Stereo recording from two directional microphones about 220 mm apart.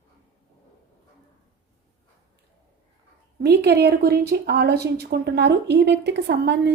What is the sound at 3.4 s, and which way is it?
A woman's voice, 50° right (ahead or behind).